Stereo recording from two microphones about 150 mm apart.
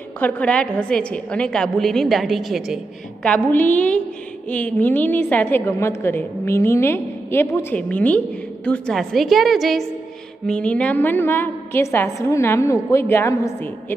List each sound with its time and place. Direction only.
0.2 s a woman's voice: 10° left (ahead or behind)
3.3 s a woman's voice: 10° left (ahead or behind)